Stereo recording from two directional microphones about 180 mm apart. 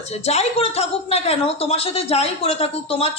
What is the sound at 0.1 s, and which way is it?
A woman's voice, 35° left (ahead or behind).